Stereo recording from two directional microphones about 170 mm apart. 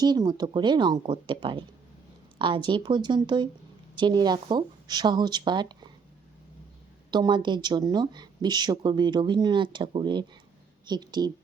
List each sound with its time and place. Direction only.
0.0 s speech: 25° right (ahead or behind)
7.1 s speech: 25° right (ahead or behind)